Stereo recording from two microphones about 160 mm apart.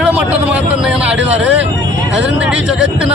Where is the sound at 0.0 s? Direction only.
10° right (ahead or behind).